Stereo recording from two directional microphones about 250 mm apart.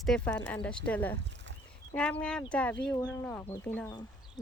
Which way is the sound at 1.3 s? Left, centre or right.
Right.